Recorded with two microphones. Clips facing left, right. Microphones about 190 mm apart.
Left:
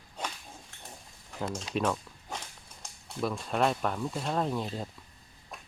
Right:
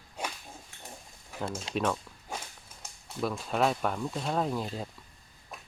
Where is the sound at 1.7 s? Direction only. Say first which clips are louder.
Even; 5° left (ahead or behind).